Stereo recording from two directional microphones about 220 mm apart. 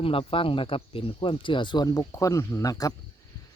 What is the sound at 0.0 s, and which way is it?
Speech, 25° left (ahead or behind).